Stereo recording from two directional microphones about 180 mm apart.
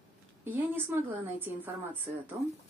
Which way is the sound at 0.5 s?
10° right (ahead or behind).